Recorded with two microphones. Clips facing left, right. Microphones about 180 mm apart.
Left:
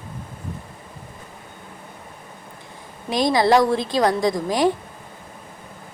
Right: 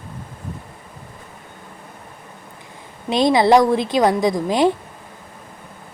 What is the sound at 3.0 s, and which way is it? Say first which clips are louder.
Speech: right 3 dB; 20° right (ahead or behind).